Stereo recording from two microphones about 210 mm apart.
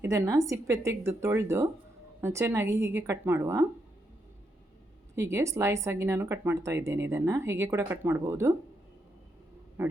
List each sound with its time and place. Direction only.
0.0 s speech: 15° right (ahead or behind)
5.1 s speech: 15° right (ahead or behind)
9.8 s speech: 10° right (ahead or behind)